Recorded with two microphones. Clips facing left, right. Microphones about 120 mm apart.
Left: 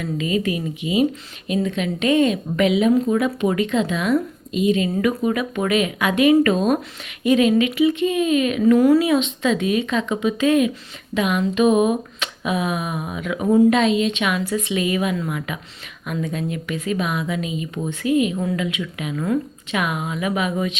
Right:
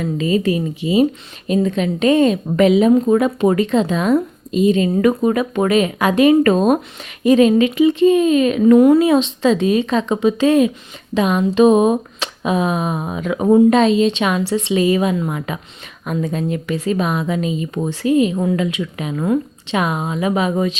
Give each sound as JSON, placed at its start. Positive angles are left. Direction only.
{"t": 0.0, "sound": "speech", "side_deg": -35}